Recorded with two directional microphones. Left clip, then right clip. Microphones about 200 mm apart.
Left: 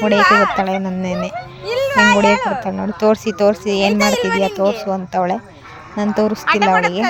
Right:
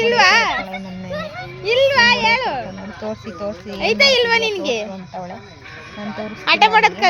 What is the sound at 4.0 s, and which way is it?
Speech, 35° right (ahead or behind).